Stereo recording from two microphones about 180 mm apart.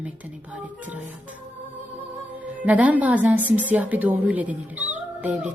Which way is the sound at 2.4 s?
10° right (ahead or behind).